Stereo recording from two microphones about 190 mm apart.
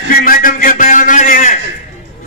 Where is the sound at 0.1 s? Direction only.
50° left (ahead or behind).